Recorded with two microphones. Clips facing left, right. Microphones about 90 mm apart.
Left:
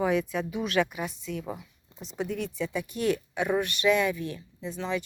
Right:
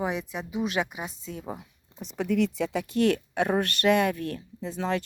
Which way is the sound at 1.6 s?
55° right (ahead or behind).